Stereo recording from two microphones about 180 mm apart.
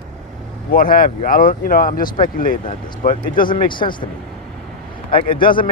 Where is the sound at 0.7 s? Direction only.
55° left (ahead or behind).